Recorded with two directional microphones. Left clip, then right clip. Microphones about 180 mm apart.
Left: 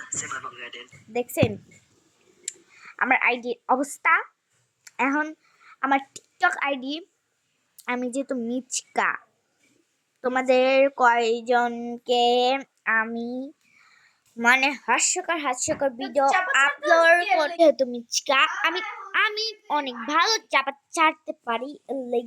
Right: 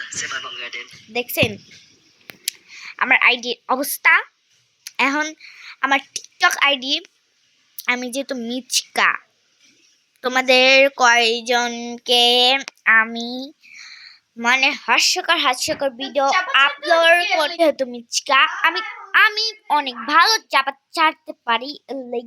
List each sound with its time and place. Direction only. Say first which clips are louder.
0.0 s a sound: right 7 dB; 20° left (ahead or behind)
0.3 s speech: right 6 dB; 10° left (ahead or behind)
2.4 s a woman's voice: right 11 dB; 5° left (ahead or behind)